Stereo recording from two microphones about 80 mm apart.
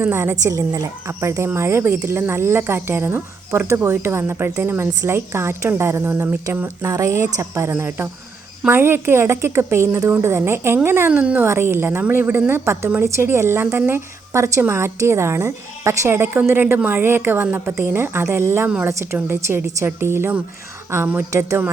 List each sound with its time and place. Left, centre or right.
0.1 s speech: right
6.8 s speech: right
11.1 s speech: centre
11.4 s a woman's voice: right